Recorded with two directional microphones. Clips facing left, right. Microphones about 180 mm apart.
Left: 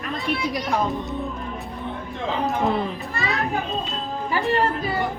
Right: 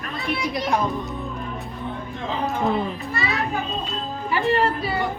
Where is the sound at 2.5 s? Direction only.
Centre (ahead or behind).